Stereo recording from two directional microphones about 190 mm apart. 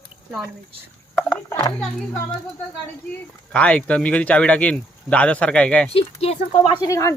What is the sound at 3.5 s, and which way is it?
Speech, 5° left (ahead or behind).